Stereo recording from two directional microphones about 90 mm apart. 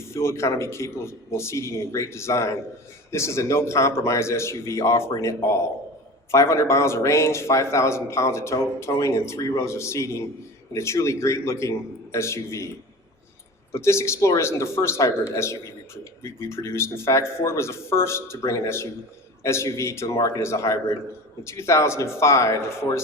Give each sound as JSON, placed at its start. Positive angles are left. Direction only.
{"t": 0.0, "sound": "a man's voice", "side_deg": 30}
{"t": 13.7, "sound": "a man's voice", "side_deg": 30}
{"t": 16.2, "sound": "a man's voice", "side_deg": 30}